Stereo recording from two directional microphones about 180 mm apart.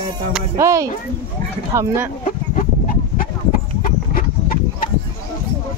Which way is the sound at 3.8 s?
50° left (ahead or behind).